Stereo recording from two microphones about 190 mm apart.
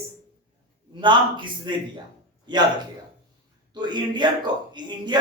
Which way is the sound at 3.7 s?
25° right (ahead or behind).